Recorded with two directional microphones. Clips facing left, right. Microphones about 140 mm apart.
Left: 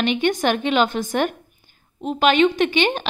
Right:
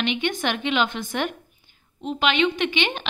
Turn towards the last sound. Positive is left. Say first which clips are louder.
# left 6 dB
turn(degrees=40)  # may be behind; listen again after turning